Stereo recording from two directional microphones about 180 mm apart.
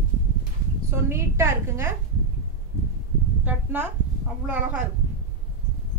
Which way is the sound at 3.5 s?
10° right (ahead or behind).